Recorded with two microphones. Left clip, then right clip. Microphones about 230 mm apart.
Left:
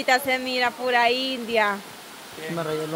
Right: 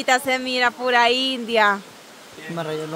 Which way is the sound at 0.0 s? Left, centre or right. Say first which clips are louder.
Right 2 dB; right.